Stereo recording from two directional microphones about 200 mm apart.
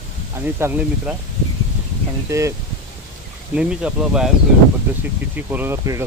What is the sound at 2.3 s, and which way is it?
Speech, 15° right (ahead or behind).